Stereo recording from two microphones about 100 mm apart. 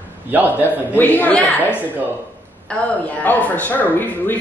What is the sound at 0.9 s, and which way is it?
Speech, 15° left (ahead or behind).